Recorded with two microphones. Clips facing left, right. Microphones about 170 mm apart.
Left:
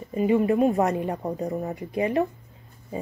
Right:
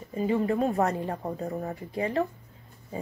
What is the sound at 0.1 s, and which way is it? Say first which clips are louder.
Speech: left 5 dB; 15° left (ahead or behind).